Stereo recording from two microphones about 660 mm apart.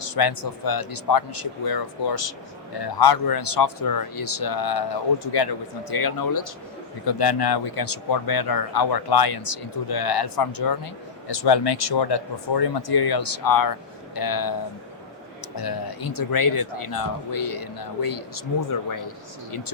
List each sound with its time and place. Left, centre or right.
0.1 s speech: left
15.5 s speech: left